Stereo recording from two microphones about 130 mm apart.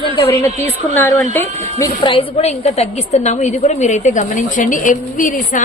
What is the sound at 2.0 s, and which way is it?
A woman's voice, 50° left (ahead or behind).